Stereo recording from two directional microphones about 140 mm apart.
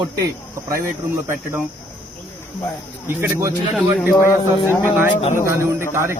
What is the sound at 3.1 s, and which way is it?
Speech, 20° right (ahead or behind).